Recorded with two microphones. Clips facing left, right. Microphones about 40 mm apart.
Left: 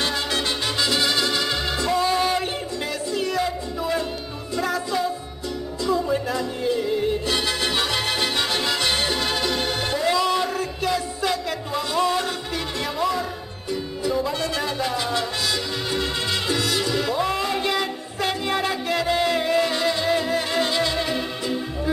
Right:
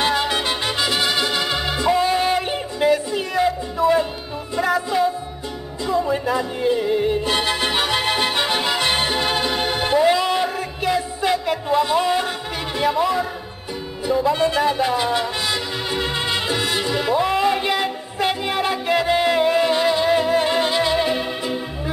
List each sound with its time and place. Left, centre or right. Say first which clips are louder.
0.0 s music: right 4 dB; right
14.3 s music: right 7 dB; right